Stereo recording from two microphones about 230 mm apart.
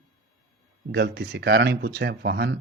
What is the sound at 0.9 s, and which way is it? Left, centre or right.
Speech, right.